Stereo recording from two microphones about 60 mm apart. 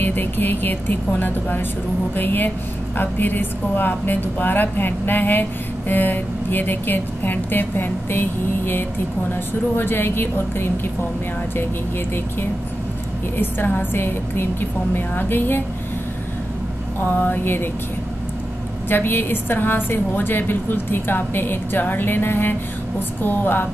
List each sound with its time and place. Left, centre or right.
0.0 s a woman's voice: left
13.4 s a woman's voice: left
17.0 s a woman's voice: left
18.9 s a woman's voice: left